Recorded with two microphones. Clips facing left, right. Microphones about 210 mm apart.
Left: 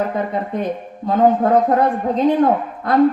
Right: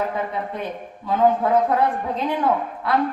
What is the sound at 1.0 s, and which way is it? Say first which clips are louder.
A woman's voice: left 4 dB; 45° left (ahead or behind).